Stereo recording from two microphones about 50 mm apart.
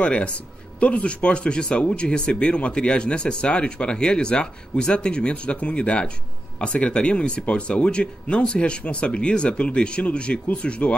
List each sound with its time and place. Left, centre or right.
0.0 s speech: left